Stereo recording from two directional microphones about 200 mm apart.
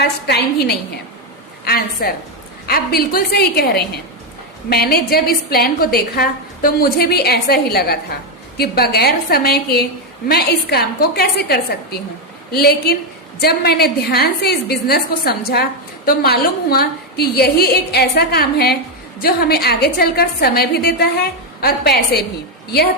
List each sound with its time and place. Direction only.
0.0 s a woman's voice: 55° left (ahead or behind)